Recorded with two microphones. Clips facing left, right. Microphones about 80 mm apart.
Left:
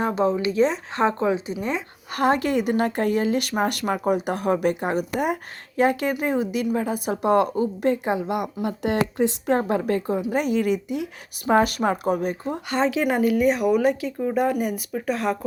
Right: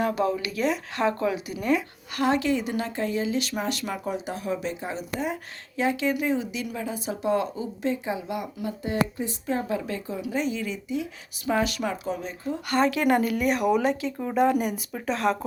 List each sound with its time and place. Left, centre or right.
0.0 s a woman's voice: left
2.1 s speech: left
9.6 s speech: left
11.4 s speech: left
12.6 s speech: centre